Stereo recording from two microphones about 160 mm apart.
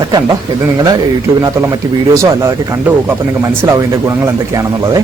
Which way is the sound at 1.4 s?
15° right (ahead or behind).